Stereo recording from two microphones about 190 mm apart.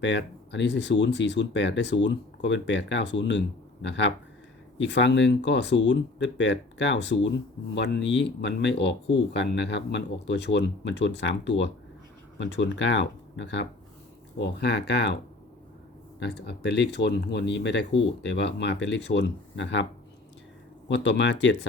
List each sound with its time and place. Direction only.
0.0 s speech: 65° left (ahead or behind)
16.2 s speech: 60° left (ahead or behind)